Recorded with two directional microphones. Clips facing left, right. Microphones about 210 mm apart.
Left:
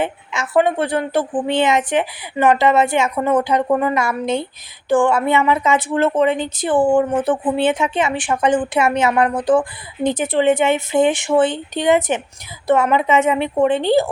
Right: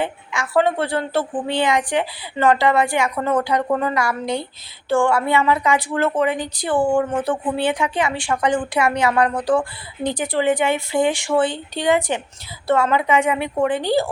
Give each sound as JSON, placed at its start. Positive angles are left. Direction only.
{"t": 0.0, "sound": "speech", "side_deg": 20}